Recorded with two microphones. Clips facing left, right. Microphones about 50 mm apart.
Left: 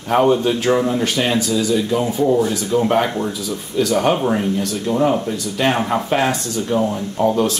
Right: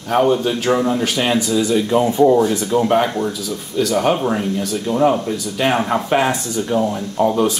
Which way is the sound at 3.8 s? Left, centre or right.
Centre.